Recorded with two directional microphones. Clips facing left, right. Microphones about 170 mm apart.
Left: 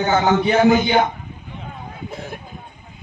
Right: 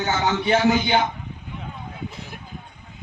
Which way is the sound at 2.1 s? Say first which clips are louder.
Left 7 dB; 50° left (ahead or behind).